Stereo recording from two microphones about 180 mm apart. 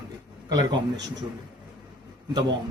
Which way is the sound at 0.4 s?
20° right (ahead or behind).